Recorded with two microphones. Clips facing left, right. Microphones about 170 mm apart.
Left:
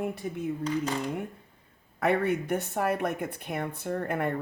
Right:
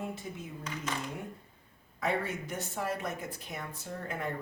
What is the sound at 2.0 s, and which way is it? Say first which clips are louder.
Speech: left 7 dB; 60° left (ahead or behind).